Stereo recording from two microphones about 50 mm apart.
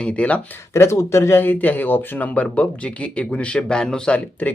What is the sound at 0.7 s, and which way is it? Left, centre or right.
Speech, left.